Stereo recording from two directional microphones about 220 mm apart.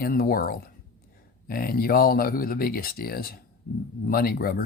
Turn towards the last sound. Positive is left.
turn(degrees=45)  # may be behind; listen again after turning